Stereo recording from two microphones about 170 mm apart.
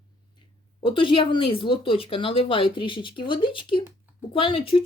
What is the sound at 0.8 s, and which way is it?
Speech, 30° left (ahead or behind).